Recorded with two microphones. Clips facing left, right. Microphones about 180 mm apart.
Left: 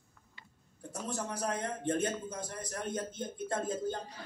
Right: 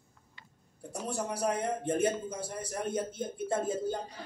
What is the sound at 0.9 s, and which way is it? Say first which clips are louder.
A man's voice: right 3 dB; 10° right (ahead or behind).